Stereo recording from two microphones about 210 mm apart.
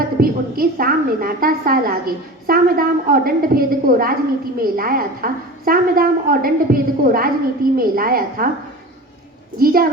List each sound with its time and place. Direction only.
0.2 s a woman's voice: 45° right (ahead or behind)
9.6 s a woman's voice: 45° right (ahead or behind)